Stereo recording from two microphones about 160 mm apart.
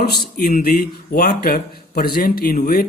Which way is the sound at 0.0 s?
75° left (ahead or behind).